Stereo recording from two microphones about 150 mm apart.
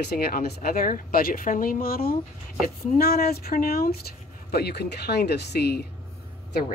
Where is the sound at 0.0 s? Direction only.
90° left.